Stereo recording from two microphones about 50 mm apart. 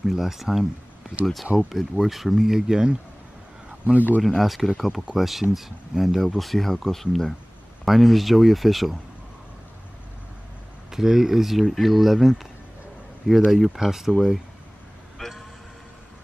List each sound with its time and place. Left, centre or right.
0.0 s speech: centre
3.8 s speech: right
4.2 s speech: centre
10.9 s speech: centre
15.1 s vehicle: centre